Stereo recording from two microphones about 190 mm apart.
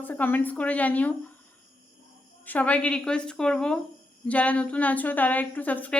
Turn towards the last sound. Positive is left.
turn(degrees=10)  # may be behind; listen again after turning